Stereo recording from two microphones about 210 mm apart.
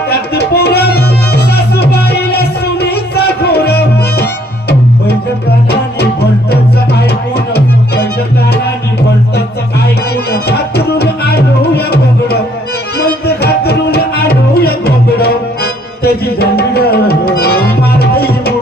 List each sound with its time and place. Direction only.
0.1 s music: 50° left (ahead or behind)
10.3 s music: 50° left (ahead or behind)